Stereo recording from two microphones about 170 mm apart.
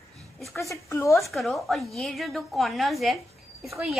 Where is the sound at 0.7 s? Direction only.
15° left (ahead or behind).